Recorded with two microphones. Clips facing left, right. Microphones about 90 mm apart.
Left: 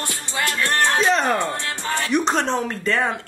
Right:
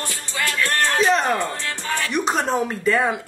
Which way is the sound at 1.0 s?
Centre (ahead or behind).